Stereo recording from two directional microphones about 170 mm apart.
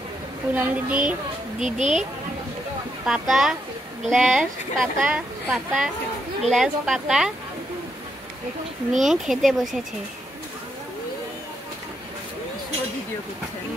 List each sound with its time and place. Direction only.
0.6 s speech: 10° right (ahead or behind)
1.6 s speech: 45° right (ahead or behind)
3.1 s speech: centre (ahead or behind)
8.9 s speech: centre (ahead or behind)